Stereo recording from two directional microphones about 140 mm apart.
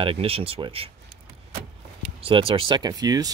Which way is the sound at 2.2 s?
40° right (ahead or behind).